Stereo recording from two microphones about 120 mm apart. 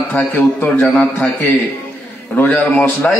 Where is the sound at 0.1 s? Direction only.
15° left (ahead or behind).